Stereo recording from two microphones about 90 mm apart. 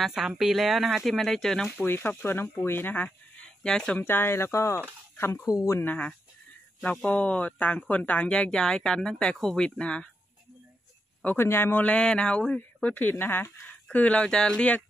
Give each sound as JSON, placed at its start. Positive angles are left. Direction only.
{"t": 0.0, "sound": "speech", "side_deg": -5}
{"t": 1.8, "sound": "speech", "side_deg": 25}
{"t": 4.0, "sound": "speech", "side_deg": 25}
{"t": 5.8, "sound": "speech", "side_deg": 15}
{"t": 11.2, "sound": "speech", "side_deg": 25}